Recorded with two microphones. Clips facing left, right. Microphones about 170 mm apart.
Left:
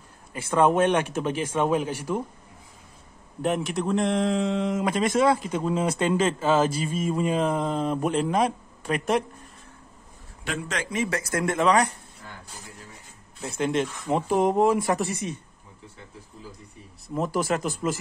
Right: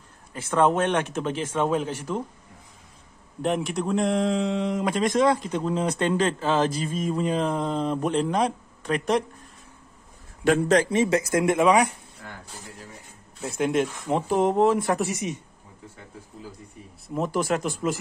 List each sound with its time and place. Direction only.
0.3 s speech: 10° left (ahead or behind)
3.4 s a man's voice: centre (ahead or behind)
10.4 s speech: 45° right (ahead or behind); by 11.9 s 10° right (ahead or behind)
12.2 s a sound: 60° right (ahead or behind)
13.4 s a man's voice: 5° right (ahead or behind)
17.1 s a man's voice: centre (ahead or behind)